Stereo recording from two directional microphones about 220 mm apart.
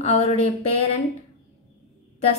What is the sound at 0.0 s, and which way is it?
Speech, 30° left (ahead or behind).